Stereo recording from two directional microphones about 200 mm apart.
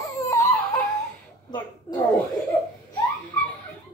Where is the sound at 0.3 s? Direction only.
15° left (ahead or behind).